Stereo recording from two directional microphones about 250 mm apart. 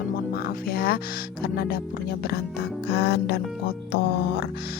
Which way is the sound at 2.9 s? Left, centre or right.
Left.